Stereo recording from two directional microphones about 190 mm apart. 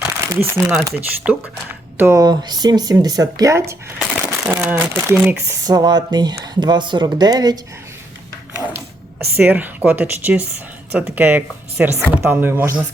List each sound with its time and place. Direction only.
0.0 s speech: 15° right (ahead or behind)
3.9 s a sound: 5° right (ahead or behind)
4.5 s speech: 10° right (ahead or behind)
5.6 s speech: 20° right (ahead or behind)
8.5 s a sound: 5° right (ahead or behind)
9.3 s speech: 10° right (ahead or behind)